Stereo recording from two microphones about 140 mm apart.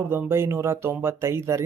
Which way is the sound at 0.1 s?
20° right (ahead or behind).